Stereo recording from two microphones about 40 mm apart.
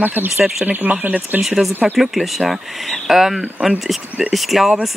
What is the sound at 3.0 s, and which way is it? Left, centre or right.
Speech, centre.